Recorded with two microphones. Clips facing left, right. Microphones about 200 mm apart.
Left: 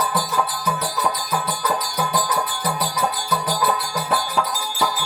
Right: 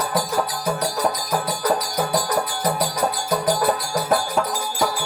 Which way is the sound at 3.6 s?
45° right (ahead or behind).